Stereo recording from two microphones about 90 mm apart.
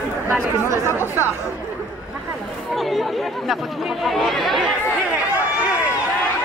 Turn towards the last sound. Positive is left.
turn(degrees=0)  # may be behind; listen again after turning